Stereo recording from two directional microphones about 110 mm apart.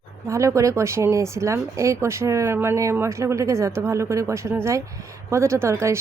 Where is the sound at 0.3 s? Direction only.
30° right (ahead or behind).